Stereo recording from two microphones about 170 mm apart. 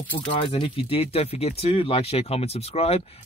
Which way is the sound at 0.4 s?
30° left (ahead or behind).